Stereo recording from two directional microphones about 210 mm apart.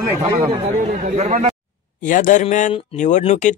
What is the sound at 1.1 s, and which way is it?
Speech, 35° right (ahead or behind).